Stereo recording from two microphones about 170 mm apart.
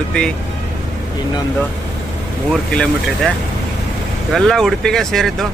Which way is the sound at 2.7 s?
5° left (ahead or behind).